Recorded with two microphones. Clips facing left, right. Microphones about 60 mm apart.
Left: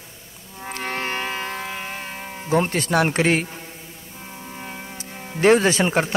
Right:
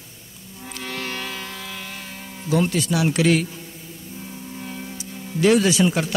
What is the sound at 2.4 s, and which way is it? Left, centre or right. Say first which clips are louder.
A man's voice: even; left.